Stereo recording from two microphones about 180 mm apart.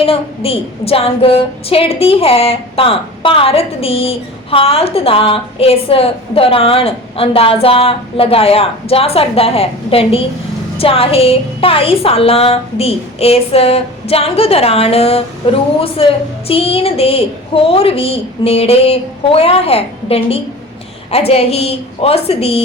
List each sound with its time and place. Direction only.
0.0 s a woman's voice: 30° left (ahead or behind)